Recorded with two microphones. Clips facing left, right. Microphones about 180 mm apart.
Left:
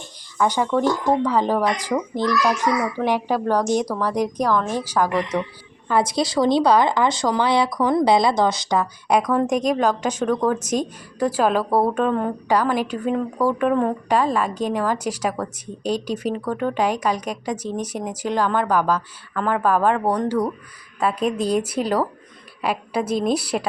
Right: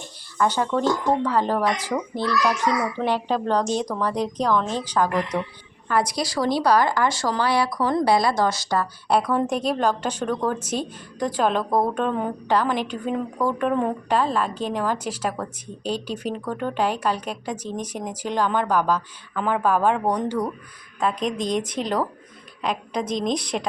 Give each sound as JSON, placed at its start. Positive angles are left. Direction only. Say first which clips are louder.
{"t": 0.3, "sound": "a child's voice", "louder": "left 2 dB", "side_deg": 10}
{"t": 5.9, "sound": "speech", "louder": "left 3 dB", "side_deg": 25}
{"t": 9.3, "sound": "a child's voice", "louder": "left 3 dB", "side_deg": 10}